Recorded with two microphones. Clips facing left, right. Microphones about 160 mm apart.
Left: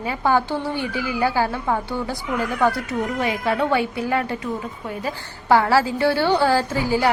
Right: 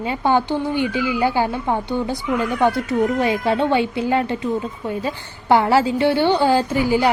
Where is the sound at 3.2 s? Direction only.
30° right (ahead or behind).